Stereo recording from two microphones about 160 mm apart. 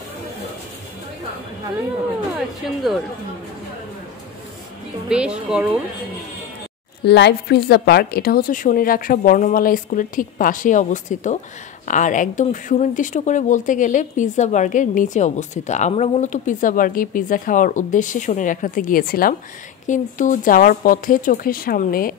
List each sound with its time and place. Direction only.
2.3 s speech: centre (ahead or behind)
5.1 s speech: 5° right (ahead or behind)
7.1 s a woman's voice: 90° left; by 19.3 s 65° left (ahead or behind)
19.9 s a woman's voice: 55° left (ahead or behind)